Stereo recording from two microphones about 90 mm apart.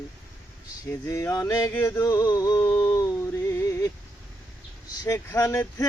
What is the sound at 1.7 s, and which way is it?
Male singing, 30° left (ahead or behind).